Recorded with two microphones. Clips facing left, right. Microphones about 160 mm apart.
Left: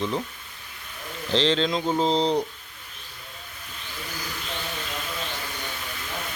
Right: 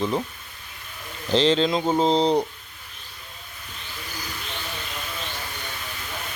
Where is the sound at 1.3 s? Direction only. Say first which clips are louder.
Right 3 dB; 5° right (ahead or behind).